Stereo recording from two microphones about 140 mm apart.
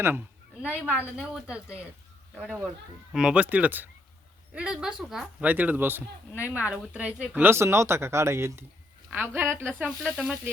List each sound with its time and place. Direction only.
0.0 s a sound: 15° right (ahead or behind)
0.9 s speech: 10° right (ahead or behind)
6.3 s speech: 20° left (ahead or behind)
6.6 s speech: 10° right (ahead or behind)